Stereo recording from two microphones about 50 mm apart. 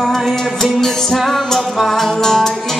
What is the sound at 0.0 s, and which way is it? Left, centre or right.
Music, centre.